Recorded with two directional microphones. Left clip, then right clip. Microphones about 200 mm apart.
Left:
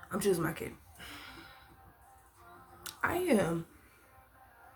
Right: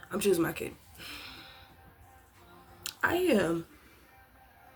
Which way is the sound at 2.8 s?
40° right (ahead or behind).